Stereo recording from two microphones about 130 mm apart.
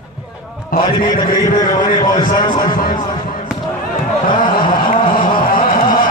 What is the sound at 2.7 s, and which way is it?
Speech, 90° left.